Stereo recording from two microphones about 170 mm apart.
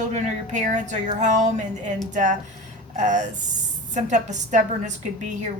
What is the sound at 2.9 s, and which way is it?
A woman's voice, 45° right (ahead or behind).